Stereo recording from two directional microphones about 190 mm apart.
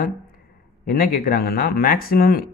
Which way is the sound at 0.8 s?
50° left (ahead or behind).